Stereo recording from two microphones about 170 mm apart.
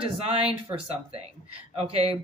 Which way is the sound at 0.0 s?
35° right (ahead or behind).